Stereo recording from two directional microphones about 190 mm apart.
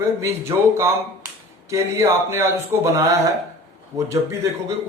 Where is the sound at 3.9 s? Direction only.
15° right (ahead or behind).